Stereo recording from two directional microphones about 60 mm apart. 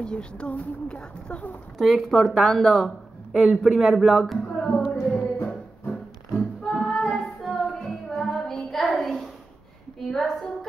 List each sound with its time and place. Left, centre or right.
0.0 s speech: centre
1.8 s a woman's voice: centre
4.6 s a sound: centre
5.1 s music: left
6.6 s music: centre
10.0 s a sound: centre